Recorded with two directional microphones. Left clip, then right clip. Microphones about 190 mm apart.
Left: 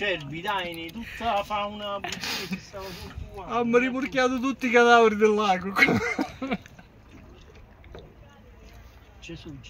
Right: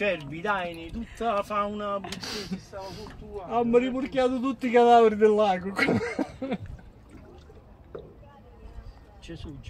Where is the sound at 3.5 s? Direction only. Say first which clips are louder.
Even; 40° left (ahead or behind).